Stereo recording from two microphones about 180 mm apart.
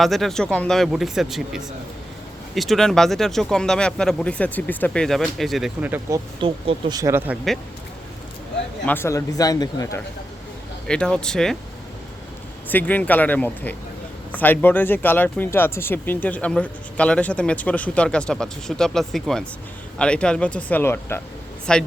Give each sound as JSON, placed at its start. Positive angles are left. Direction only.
{"t": 0.0, "sound": "speech", "side_deg": 0}
{"t": 6.4, "sound": "speech", "side_deg": -30}
{"t": 8.9, "sound": "speech", "side_deg": 15}
{"t": 10.8, "sound": "speech", "side_deg": 5}
{"t": 12.6, "sound": "speech", "side_deg": 10}